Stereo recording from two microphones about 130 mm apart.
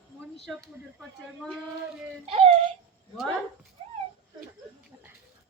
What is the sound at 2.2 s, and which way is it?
Speech, 50° right (ahead or behind).